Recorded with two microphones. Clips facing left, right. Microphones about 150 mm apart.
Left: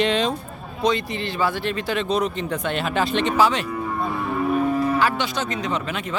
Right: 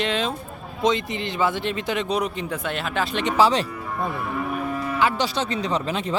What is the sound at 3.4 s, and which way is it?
Speech, 30° right (ahead or behind).